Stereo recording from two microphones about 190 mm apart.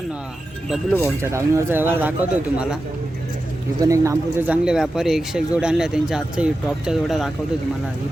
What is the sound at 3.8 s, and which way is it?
Speech, 15° right (ahead or behind).